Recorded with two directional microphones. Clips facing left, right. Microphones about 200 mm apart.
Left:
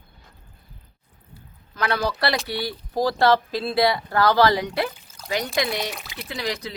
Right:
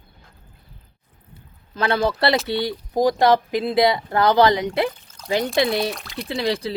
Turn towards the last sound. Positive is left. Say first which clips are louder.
# right 6 dB
turn(degrees=-30)  # may be behind; listen again after turning